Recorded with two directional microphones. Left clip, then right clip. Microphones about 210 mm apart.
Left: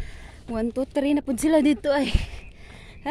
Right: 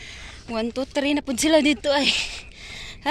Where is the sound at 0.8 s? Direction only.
25° left (ahead or behind).